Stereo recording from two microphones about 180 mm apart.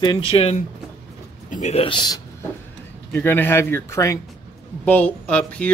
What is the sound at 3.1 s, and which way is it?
Speech, 10° left (ahead or behind).